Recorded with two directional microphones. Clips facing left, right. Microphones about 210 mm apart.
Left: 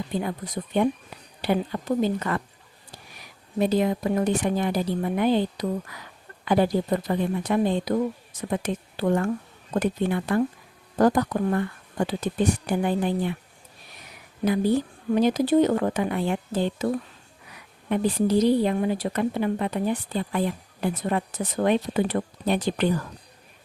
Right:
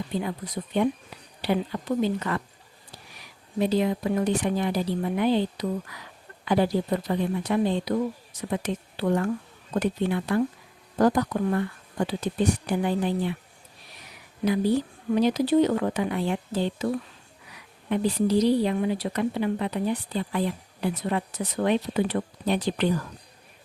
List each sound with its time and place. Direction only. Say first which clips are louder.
0.2 s a woman's voice: left 1 dB; 45° left (ahead or behind)
3.6 s a woman's voice: left 1 dB; 50° left (ahead or behind)
15.1 s a woman's voice: left 1 dB; 50° left (ahead or behind)